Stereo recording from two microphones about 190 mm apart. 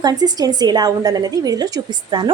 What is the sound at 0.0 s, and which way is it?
A woman's voice, 20° right (ahead or behind).